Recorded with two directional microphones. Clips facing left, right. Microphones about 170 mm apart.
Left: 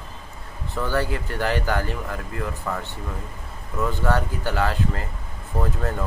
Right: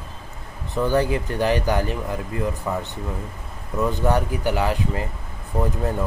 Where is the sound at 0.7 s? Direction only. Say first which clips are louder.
Right 5 dB; 20° right (ahead or behind).